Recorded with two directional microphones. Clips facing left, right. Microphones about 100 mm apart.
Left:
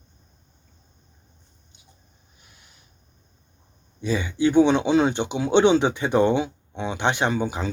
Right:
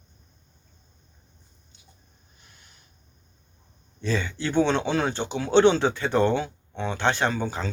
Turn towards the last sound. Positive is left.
turn(degrees=15)  # may be behind; listen again after turning